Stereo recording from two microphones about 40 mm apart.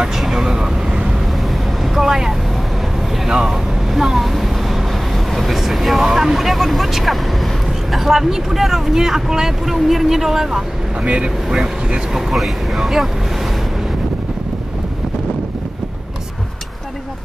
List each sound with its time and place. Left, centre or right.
0.0 s vehicle: centre
2.0 s vehicle: centre
7.9 s speech: centre
11.0 s speech: right
11.4 s speech: centre